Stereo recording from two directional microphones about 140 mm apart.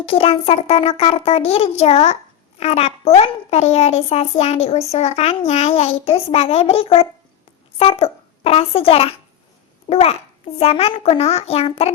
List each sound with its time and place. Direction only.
0.0 s a child's voice: 45° left (ahead or behind)